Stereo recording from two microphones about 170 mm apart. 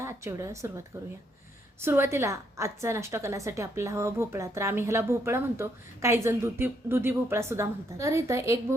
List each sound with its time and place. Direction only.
0.0 s a woman's voice: 15° right (ahead or behind)